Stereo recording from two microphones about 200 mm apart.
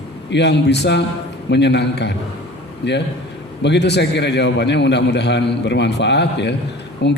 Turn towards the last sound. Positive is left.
turn(degrees=60)  # may be behind; listen again after turning